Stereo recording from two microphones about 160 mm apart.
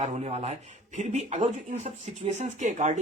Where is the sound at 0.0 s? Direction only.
45° right (ahead or behind).